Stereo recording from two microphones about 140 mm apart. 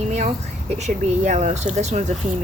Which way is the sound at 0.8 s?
55° right (ahead or behind).